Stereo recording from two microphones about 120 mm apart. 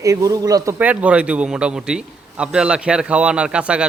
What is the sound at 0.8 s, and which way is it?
A man's voice, 10° right (ahead or behind).